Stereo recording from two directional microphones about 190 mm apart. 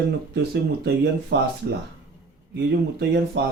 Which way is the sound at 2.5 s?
60° right (ahead or behind).